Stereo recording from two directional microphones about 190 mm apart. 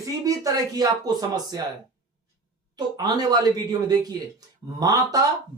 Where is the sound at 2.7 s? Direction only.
20° right (ahead or behind).